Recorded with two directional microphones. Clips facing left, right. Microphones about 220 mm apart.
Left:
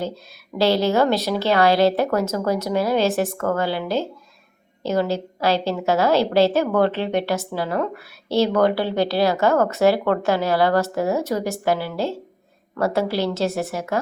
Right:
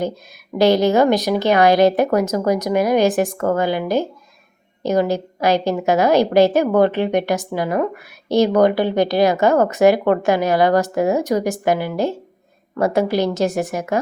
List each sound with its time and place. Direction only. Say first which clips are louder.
0.6 s a woman's voice: right 4 dB; 15° right (ahead or behind)